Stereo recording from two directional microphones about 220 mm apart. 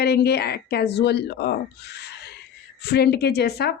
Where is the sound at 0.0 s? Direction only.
50° left (ahead or behind).